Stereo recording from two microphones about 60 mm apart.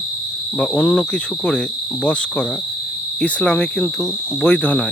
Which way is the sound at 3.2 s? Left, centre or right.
Centre.